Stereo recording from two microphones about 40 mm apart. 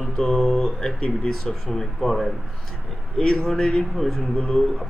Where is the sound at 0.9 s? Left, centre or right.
Left.